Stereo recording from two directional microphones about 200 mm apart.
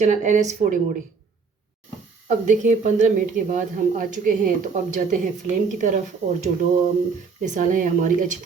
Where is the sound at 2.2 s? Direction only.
40° right (ahead or behind).